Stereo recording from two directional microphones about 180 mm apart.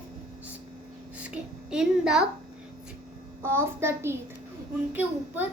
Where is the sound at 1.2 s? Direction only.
5° right (ahead or behind).